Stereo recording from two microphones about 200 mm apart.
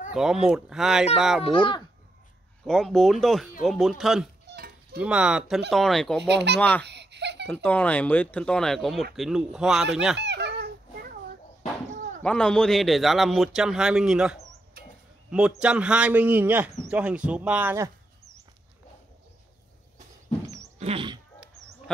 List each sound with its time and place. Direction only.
0.1 s a man's voice: centre (ahead or behind)
1.4 s speech: 25° left (ahead or behind)
2.6 s a man's voice: centre (ahead or behind)
4.5 s livestock: 50° right (ahead or behind)
4.9 s a man's voice: 5° right (ahead or behind)
6.2 s speech: 60° right (ahead or behind)
6.8 s laughter: 60° right (ahead or behind)
7.4 s a man's voice: 10° left (ahead or behind)
10.1 s a sound: 55° right (ahead or behind)
12.2 s a man's voice: 5° left (ahead or behind); by 17.9 s 10° right (ahead or behind)
20.8 s a sound: 25° right (ahead or behind)